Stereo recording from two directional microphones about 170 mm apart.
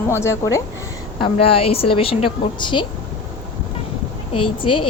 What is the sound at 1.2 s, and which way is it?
A woman's voice, 35° left (ahead or behind).